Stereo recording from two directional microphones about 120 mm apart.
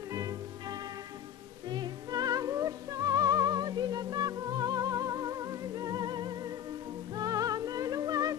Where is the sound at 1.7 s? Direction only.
35° right (ahead or behind).